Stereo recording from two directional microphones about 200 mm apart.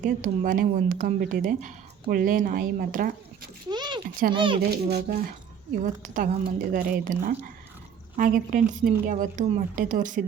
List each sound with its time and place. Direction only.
0.0 s speech: 40° right (ahead or behind)
3.7 s a sound: 20° right (ahead or behind)
4.4 s a child's voice: 25° right (ahead or behind)
4.6 s a woman's voice: 55° right (ahead or behind)